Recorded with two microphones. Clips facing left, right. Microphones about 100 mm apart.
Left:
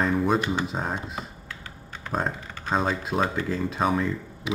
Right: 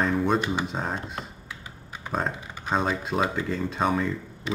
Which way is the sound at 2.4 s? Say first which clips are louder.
Even; 15° right (ahead or behind).